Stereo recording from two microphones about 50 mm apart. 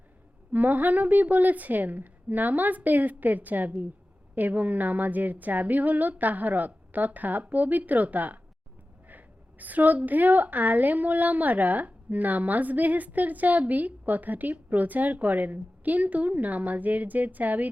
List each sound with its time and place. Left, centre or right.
0.5 s a woman's voice: right